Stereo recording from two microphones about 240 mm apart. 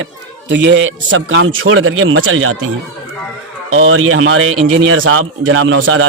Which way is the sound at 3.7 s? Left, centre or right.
Right.